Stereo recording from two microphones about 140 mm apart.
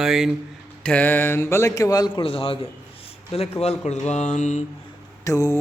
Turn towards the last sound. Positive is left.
turn(degrees=20)  # may be behind; listen again after turning